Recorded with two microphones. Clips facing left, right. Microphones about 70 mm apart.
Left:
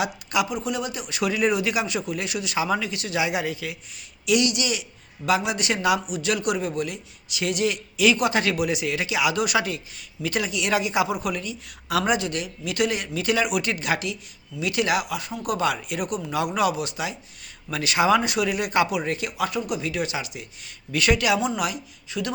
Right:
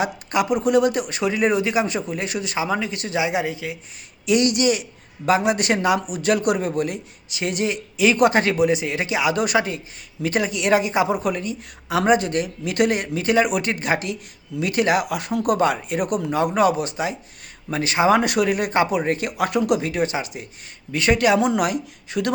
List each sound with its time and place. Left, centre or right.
0.0 s speech: right
1.1 s a man's voice: right
2.6 s speech: right
2.9 s a man's voice: right
3.2 s speech: right
4.3 s a man's voice: right
15.5 s a man's voice: right
18.2 s speech: right
19.8 s a man's voice: right
21.2 s speech: right